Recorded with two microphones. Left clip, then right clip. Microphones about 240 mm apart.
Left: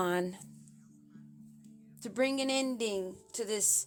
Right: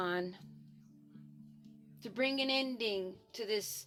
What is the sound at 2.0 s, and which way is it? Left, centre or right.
A woman's voice, centre.